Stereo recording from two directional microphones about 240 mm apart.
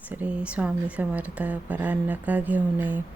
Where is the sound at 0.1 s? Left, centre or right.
Centre.